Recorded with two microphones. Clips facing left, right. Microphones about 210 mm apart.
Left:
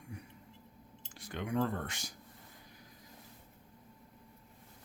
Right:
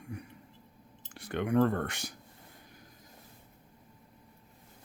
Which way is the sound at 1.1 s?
60° right (ahead or behind).